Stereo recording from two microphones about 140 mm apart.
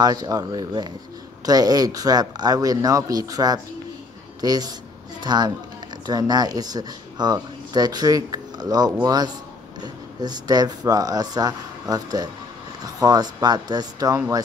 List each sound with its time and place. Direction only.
0.0 s speech: 30° right (ahead or behind)